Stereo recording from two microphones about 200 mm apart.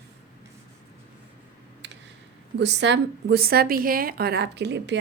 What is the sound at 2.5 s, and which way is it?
A woman's voice, 60° right (ahead or behind).